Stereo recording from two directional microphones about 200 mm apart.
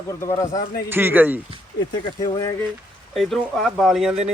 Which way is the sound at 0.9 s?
10° right (ahead or behind).